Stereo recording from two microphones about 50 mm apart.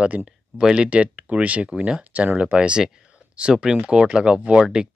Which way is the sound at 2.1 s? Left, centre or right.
Right.